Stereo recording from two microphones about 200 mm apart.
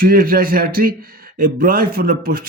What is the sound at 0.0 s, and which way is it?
Speech, 45° right (ahead or behind).